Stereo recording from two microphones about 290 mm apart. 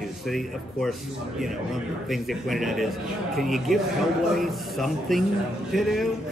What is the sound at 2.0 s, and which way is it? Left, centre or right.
A man's voice, centre.